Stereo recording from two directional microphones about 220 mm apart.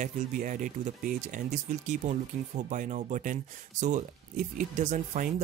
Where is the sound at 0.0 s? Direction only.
35° right (ahead or behind).